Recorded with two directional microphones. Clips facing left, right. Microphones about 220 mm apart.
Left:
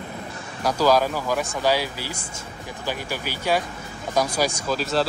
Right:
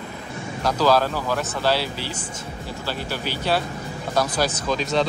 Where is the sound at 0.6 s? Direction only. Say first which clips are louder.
Even; 10° left (ahead or behind).